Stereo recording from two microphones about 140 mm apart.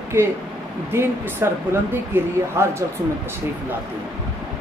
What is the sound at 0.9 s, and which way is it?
A woman's voice, 20° right (ahead or behind).